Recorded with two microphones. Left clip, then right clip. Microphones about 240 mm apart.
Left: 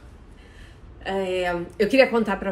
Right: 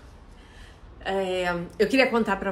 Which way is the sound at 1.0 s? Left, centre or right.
Centre.